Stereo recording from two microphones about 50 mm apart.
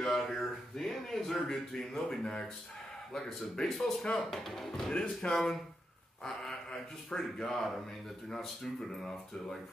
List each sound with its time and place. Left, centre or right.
0.1 s speech: centre
4.9 s speech: left
5.3 s speech: centre
8.9 s speech: centre